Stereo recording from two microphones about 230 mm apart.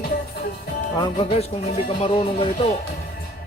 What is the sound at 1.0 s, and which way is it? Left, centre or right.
Speech, left.